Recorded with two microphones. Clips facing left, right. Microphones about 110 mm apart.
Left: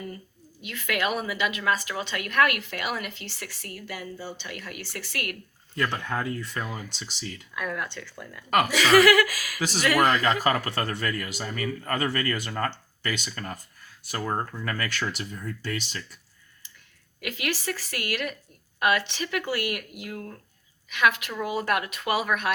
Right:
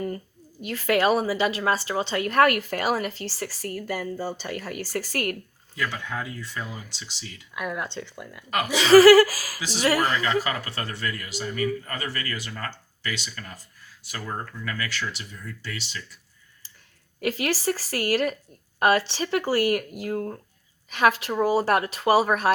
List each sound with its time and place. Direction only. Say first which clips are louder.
0.6 s a woman's voice: right 7 dB; 35° right (ahead or behind)
5.7 s a man's voice: left 2 dB; 50° left (ahead or behind)
7.5 s a woman's voice: right 2 dB; 15° right (ahead or behind); by 9.6 s 35° right (ahead or behind)
9.6 s a man's voice: even; 50° left (ahead or behind)
14.6 s a man's voice: left 1 dB; 50° left (ahead or behind)
17.2 s a woman's voice: right 5 dB; 35° right (ahead or behind)